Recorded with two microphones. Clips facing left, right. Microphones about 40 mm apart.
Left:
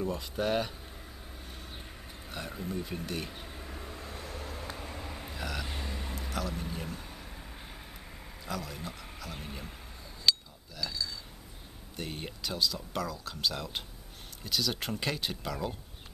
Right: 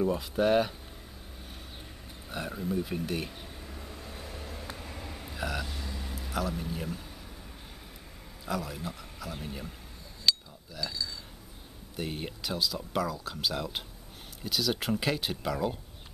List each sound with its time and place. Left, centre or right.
0.0 s speech: centre
2.2 s speech: centre
3.3 s vehicle: centre
5.4 s speech: centre
5.7 s vehicle: left
6.3 s speech: centre
8.5 s speech: centre
10.3 s cutlery: centre
12.0 s speech: centre